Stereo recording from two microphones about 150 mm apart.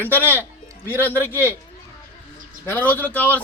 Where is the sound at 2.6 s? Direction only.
15° left (ahead or behind).